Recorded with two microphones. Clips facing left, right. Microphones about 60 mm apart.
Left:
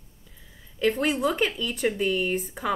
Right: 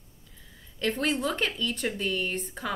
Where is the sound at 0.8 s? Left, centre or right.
Centre.